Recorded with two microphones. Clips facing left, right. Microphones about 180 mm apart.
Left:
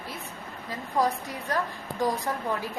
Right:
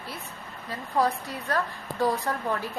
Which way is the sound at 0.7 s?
15° left (ahead or behind).